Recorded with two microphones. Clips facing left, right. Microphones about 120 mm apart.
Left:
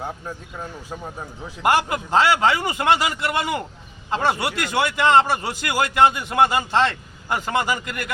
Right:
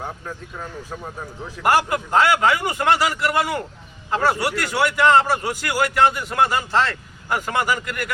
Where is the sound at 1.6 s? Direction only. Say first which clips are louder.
Right 1 dB; 25° left (ahead or behind).